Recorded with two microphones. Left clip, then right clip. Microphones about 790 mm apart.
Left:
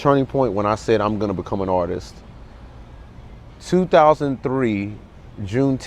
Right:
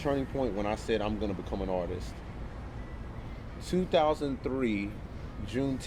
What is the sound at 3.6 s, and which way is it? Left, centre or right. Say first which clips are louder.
Speech: left 13 dB; left.